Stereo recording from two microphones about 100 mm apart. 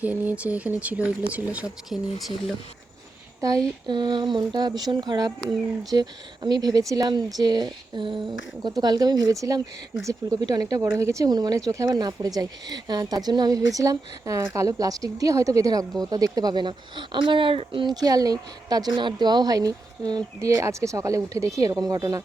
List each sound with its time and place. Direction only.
0.0 s speech: 15° right (ahead or behind)
3.8 s speech: 50° right (ahead or behind)
8.6 s speech: 45° right (ahead or behind)